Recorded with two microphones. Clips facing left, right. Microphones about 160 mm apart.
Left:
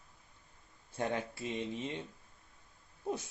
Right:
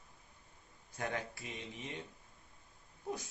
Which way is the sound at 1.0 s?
25° left (ahead or behind).